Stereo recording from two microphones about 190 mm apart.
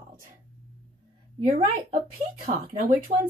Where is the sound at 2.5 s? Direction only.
45° right (ahead or behind).